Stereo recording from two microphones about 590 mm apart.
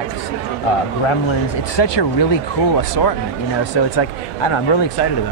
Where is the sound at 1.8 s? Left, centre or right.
Left.